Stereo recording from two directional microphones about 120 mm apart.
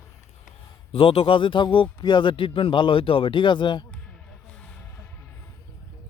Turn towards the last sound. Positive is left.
turn(degrees=15)  # may be behind; listen again after turning